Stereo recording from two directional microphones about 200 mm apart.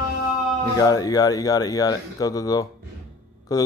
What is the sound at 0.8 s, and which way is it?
Mantra, 15° left (ahead or behind).